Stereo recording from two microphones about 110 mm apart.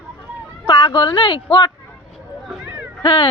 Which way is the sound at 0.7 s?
45° left (ahead or behind).